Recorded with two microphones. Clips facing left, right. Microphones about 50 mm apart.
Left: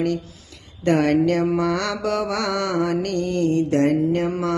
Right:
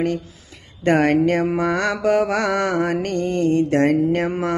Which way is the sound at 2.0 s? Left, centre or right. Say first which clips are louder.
Right 6 dB; right.